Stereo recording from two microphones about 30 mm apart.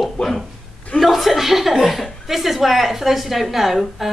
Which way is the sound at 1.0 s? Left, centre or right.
Centre.